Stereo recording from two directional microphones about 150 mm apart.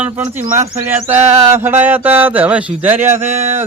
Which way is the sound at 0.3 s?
55° right (ahead or behind).